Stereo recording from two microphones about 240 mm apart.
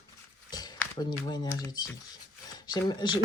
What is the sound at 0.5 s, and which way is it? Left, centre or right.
A woman's voice, centre.